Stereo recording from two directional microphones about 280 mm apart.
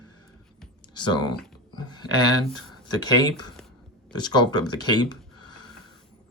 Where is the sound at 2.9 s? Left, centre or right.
Centre.